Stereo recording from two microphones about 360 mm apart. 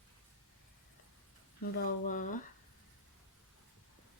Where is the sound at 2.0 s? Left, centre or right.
Left.